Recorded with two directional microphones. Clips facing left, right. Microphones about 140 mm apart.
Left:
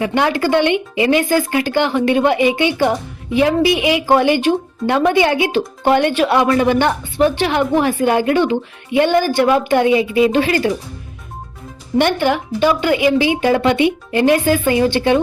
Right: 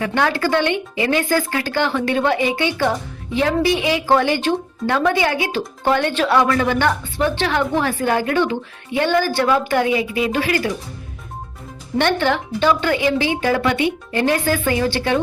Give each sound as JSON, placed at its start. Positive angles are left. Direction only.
{"t": 0.0, "sound": "speech", "side_deg": 15}
{"t": 11.9, "sound": "speech", "side_deg": 15}